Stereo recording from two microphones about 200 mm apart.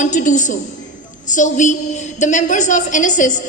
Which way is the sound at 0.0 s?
40° left (ahead or behind).